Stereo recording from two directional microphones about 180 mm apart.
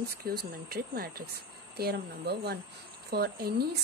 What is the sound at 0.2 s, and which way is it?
Speech, 55° right (ahead or behind).